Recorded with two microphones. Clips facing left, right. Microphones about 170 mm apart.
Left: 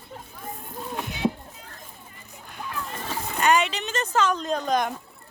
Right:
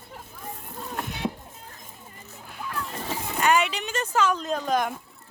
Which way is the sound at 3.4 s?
10° right (ahead or behind).